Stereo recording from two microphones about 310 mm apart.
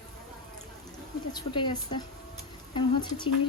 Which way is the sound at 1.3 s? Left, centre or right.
Centre.